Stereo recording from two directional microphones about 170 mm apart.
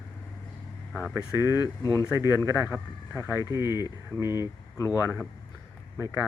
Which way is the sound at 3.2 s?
15° right (ahead or behind).